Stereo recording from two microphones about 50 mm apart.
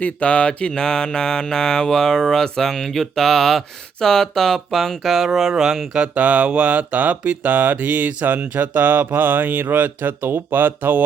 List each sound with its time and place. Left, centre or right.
0.0 s mantra: left
0.7 s speech: centre
5.9 s speech: right